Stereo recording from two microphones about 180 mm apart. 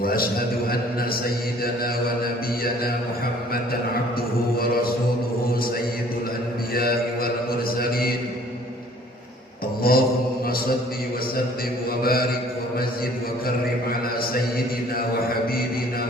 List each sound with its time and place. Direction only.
0.0 s a man's voice: 55° left (ahead or behind)
4.5 s music: 55° left (ahead or behind)
6.7 s mantra: 55° left (ahead or behind)
7.8 s a sound: 55° left (ahead or behind)
9.8 s mantra: 55° left (ahead or behind)
12.0 s mantra: 55° left (ahead or behind)